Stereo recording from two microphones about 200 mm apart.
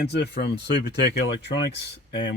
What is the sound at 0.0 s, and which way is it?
Speech, 55° left (ahead or behind).